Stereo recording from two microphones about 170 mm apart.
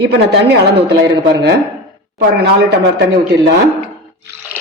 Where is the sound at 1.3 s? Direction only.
75° right (ahead or behind).